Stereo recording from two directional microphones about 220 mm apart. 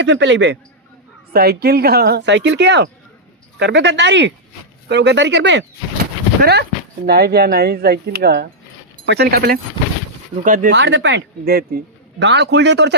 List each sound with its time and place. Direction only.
0.0 s speech: 55° right (ahead or behind); by 10.7 s 35° right (ahead or behind)
10.7 s speech: 50° right (ahead or behind)